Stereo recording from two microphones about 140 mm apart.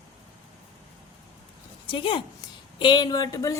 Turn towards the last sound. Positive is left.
turn(degrees=25)  # may be behind; listen again after turning